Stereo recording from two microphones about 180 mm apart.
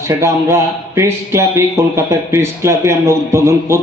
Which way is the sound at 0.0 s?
15° right (ahead or behind).